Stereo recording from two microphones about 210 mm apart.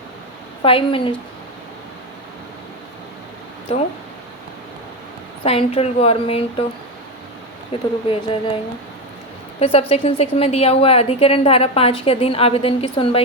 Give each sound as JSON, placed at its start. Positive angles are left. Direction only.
{"t": 0.6, "sound": "a woman's voice", "side_deg": 25}
{"t": 3.7, "sound": "a woman's voice", "side_deg": 30}
{"t": 5.4, "sound": "a woman's voice", "side_deg": 25}
{"t": 7.7, "sound": "a woman's voice", "side_deg": 25}
{"t": 9.6, "sound": "a woman's voice", "side_deg": 30}